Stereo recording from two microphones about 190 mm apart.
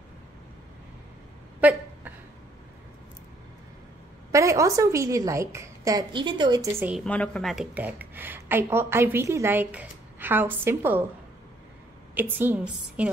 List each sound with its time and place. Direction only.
1.6 s a sound: 10° right (ahead or behind)
4.3 s speech: 15° right (ahead or behind)
7.1 s speech: 5° left (ahead or behind); by 11.1 s 10° right (ahead or behind)
12.2 s speech: 10° right (ahead or behind)